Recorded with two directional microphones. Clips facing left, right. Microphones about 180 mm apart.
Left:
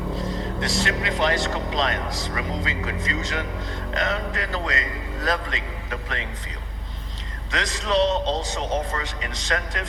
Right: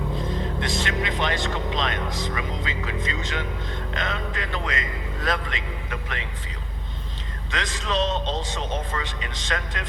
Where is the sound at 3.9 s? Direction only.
40° left (ahead or behind).